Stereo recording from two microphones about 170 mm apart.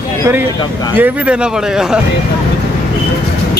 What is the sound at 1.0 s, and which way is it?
Speech, 10° right (ahead or behind).